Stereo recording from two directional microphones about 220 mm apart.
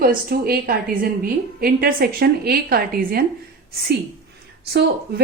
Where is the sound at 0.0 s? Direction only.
40° right (ahead or behind).